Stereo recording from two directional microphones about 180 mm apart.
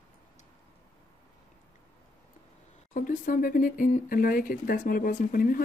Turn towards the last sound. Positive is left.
turn(degrees=50)  # may be behind; listen again after turning